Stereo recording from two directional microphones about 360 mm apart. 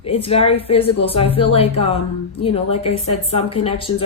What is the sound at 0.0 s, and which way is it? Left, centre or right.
Speech, centre.